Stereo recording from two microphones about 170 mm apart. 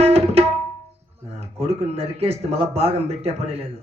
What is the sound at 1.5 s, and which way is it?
Speech, 35° right (ahead or behind).